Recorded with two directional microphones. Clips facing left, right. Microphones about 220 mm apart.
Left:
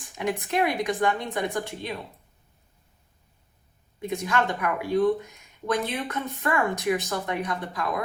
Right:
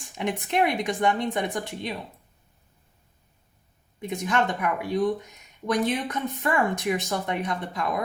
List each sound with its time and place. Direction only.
0.2 s speech: 20° right (ahead or behind)
4.1 s speech: 20° right (ahead or behind)